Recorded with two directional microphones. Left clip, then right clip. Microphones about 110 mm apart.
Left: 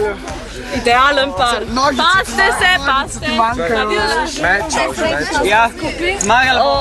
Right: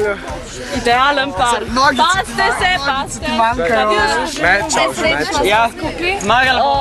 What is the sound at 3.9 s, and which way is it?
Speech, 20° right (ahead or behind).